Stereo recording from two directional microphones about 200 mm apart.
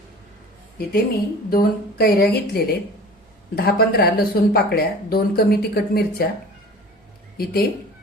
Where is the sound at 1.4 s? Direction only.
50° left (ahead or behind).